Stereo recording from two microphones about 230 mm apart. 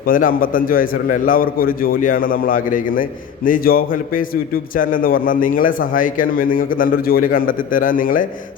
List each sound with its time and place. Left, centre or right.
0.0 s a man's voice: left